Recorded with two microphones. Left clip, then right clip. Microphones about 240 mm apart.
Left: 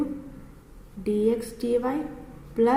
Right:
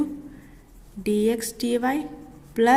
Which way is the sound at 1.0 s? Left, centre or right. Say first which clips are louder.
Right 1 dB; right.